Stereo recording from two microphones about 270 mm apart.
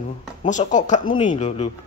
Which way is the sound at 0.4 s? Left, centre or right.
Left.